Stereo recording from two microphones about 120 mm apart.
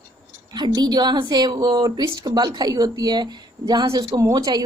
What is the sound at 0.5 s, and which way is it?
Speech, 35° right (ahead or behind).